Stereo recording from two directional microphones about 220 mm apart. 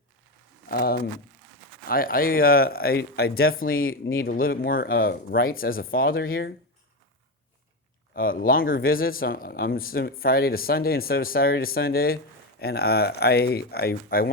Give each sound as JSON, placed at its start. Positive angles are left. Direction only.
{"t": 0.7, "sound": "speech", "side_deg": 45}
{"t": 8.1, "sound": "speech", "side_deg": 40}